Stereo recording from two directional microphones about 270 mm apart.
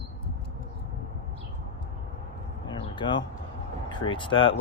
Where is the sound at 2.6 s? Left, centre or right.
Centre.